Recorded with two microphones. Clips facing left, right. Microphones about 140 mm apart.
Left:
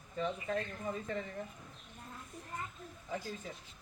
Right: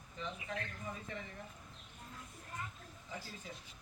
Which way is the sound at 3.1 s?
45° left (ahead or behind).